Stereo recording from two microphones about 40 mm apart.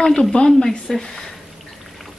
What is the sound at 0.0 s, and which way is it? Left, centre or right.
Speech, centre.